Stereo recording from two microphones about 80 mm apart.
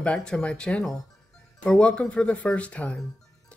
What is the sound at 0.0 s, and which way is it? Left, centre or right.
Speech, centre.